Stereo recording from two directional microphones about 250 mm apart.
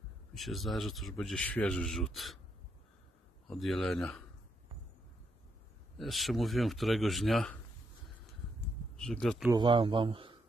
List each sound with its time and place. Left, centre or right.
0.3 s speech: centre
3.4 s speech: centre
5.9 s speech: centre
8.5 s a sound: centre
9.5 s speech: centre